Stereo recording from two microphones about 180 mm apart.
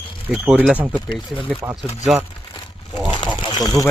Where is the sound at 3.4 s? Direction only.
20° left (ahead or behind).